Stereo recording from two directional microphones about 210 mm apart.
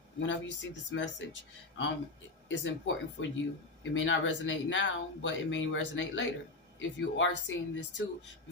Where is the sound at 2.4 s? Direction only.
65° left (ahead or behind).